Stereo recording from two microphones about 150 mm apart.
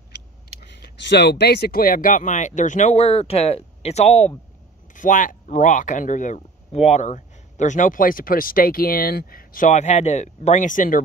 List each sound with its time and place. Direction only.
0.6 s speech: 90° left; by 4.3 s 45° left (ahead or behind)
4.9 s speech: 60° left (ahead or behind)
9.7 s speech: 50° left (ahead or behind)